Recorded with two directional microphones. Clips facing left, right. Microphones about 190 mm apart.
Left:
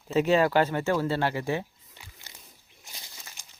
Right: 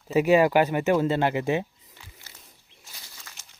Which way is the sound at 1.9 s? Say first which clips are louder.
Even; 20° left (ahead or behind).